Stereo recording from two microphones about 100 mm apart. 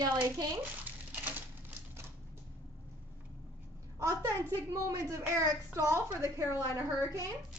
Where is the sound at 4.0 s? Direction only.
30° right (ahead or behind).